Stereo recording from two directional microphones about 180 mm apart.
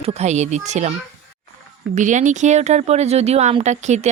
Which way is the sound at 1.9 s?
45° right (ahead or behind).